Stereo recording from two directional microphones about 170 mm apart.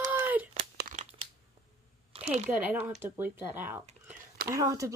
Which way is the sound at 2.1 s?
40° right (ahead or behind).